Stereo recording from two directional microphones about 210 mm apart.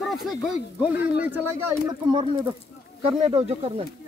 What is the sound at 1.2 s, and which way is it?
Speech, 15° right (ahead or behind).